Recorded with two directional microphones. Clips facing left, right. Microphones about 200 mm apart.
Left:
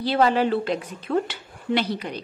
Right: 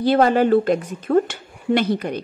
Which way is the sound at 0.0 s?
50° right (ahead or behind).